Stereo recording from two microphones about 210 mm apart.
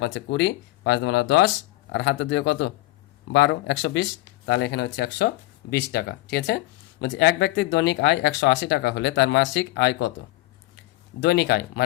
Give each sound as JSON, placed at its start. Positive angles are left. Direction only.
{"t": 0.0, "sound": "speech", "side_deg": 55}
{"t": 11.2, "sound": "speech", "side_deg": 50}